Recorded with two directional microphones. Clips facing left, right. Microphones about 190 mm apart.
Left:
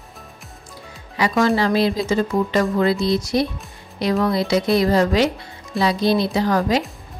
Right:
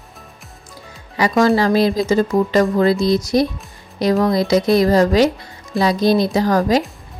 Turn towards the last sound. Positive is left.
turn(degrees=-40)  # may be behind; listen again after turning